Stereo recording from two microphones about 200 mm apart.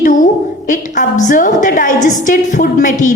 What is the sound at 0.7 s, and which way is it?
A woman's voice, 40° left (ahead or behind).